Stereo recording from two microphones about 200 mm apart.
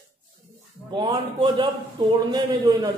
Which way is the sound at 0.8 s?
20° right (ahead or behind).